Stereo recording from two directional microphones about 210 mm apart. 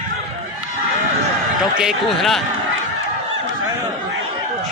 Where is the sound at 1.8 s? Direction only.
Centre (ahead or behind).